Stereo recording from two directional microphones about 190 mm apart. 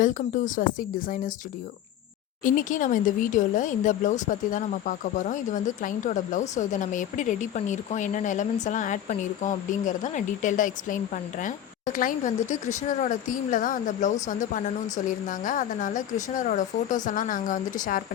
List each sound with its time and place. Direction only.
0.0 s speech: 45° left (ahead or behind)
2.4 s speech: 45° left (ahead or behind)